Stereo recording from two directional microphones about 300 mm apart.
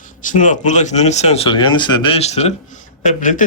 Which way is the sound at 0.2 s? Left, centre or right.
Left.